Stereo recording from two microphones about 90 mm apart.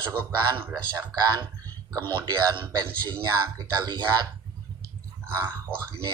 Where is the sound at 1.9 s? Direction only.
25° left (ahead or behind).